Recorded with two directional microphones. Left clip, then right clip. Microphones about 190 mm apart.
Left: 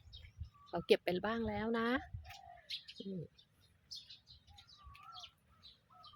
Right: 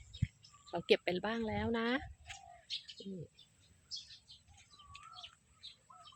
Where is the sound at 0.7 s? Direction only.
Centre (ahead or behind).